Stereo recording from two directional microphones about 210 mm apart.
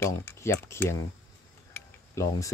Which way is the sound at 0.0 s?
10° left (ahead or behind).